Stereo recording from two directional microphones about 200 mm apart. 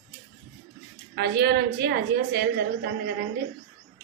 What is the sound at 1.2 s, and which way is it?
A woman's voice, 55° right (ahead or behind).